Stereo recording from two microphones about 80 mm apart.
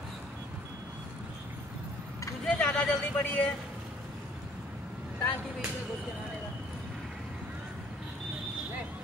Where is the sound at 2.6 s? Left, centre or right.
Centre.